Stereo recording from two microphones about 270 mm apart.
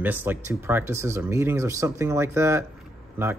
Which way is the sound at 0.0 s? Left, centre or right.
Centre.